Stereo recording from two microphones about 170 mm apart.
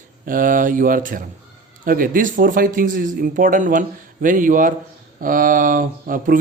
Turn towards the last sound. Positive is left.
turn(degrees=-55)  # may be behind; listen again after turning